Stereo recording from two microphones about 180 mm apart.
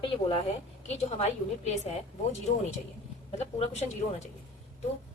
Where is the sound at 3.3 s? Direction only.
35° left (ahead or behind).